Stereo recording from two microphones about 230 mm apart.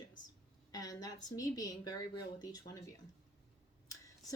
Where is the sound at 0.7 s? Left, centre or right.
Centre.